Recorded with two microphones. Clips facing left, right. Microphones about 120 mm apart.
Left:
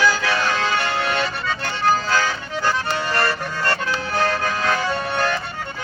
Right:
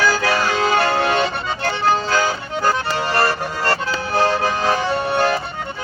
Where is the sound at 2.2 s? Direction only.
35° right (ahead or behind).